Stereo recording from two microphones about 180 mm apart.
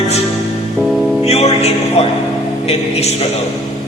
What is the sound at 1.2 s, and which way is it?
Music, 35° left (ahead or behind).